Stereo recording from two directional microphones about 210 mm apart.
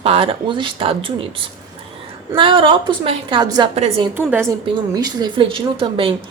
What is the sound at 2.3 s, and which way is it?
Speech, 25° right (ahead or behind).